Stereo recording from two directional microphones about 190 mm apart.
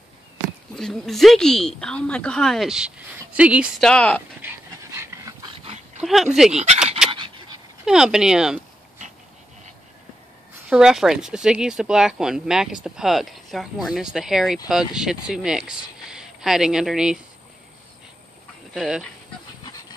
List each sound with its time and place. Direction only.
0.7 s speech: centre (ahead or behind)
3.9 s speech: 5° left (ahead or behind)
4.4 s dog: 10° right (ahead or behind)
5.9 s dog: centre (ahead or behind)
6.5 s speech: 35° right (ahead or behind)
7.1 s dog: 25° right (ahead or behind)
7.8 s speech: 5° right (ahead or behind)
10.7 s speech: 5° right (ahead or behind)
18.7 s speech: centre (ahead or behind)